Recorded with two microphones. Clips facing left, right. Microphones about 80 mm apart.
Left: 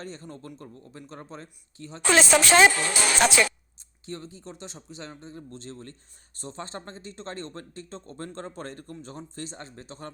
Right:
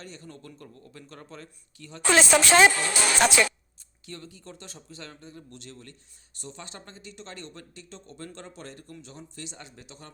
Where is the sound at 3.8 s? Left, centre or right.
Left.